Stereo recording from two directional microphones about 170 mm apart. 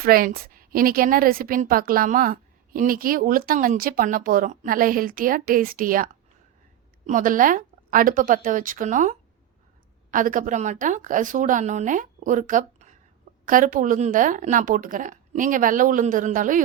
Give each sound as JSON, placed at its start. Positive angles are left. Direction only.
{"t": 0.0, "sound": "a woman's voice", "side_deg": -60}
{"t": 7.1, "sound": "a woman's voice", "side_deg": -55}